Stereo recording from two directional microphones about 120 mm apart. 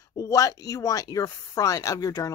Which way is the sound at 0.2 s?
30° left (ahead or behind).